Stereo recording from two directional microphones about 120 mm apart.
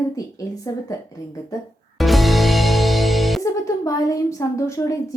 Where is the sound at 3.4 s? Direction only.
30° left (ahead or behind).